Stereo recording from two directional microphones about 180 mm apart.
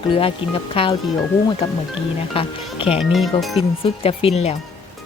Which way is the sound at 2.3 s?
30° left (ahead or behind).